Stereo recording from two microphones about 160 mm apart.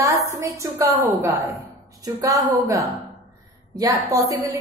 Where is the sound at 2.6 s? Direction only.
20° right (ahead or behind).